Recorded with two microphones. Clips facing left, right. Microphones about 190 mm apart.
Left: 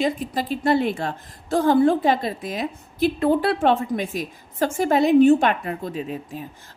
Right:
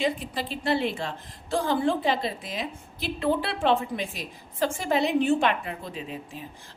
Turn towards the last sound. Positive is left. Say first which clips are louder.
# left 7 dB
turn(degrees=45)  # may be behind; listen again after turning